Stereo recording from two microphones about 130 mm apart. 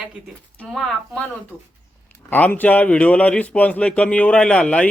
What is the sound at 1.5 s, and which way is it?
Speech, 15° right (ahead or behind).